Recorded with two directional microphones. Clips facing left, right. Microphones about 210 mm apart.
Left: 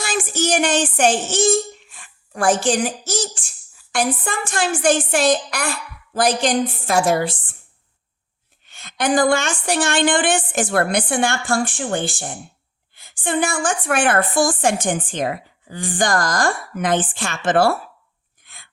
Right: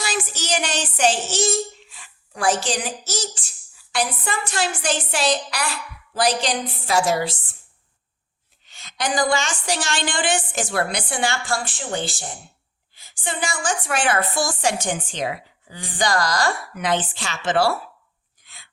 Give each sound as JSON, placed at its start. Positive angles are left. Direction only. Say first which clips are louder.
{"t": 0.0, "sound": "a sound", "louder": "left 6 dB", "side_deg": 50}
{"t": 3.9, "sound": "a woman's voice", "louder": "left 3 dB", "side_deg": 50}
{"t": 8.6, "sound": "a woman's voice", "louder": "left 5 dB", "side_deg": 55}
{"t": 18.4, "sound": "sneeze", "louder": "left 2 dB", "side_deg": 55}